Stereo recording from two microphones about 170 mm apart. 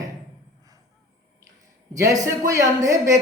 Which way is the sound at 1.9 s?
20° right (ahead or behind).